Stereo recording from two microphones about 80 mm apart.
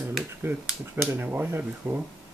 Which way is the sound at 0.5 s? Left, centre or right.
Right.